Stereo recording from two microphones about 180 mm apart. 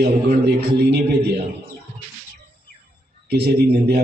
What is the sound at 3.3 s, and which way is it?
Speech, 65° right (ahead or behind).